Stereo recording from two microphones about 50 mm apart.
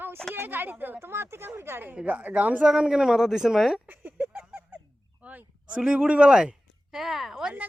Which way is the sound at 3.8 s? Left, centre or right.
Right.